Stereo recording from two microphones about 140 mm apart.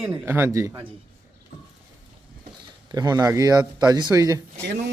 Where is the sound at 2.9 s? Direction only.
25° right (ahead or behind).